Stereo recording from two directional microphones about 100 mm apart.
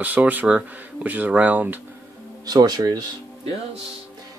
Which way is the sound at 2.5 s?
40° right (ahead or behind).